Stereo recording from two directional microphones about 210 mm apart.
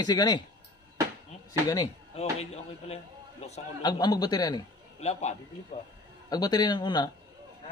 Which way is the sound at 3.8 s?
20° left (ahead or behind).